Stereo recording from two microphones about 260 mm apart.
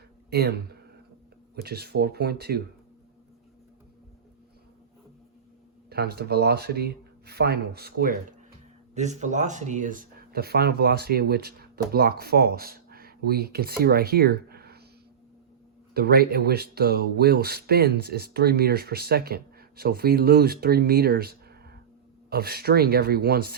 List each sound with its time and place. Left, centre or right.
0.3 s speech: right
1.5 s speech: right
5.9 s speech: right
16.0 s speech: right